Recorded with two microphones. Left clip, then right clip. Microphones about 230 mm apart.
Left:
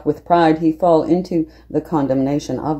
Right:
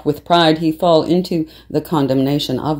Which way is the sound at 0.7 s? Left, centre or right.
Right.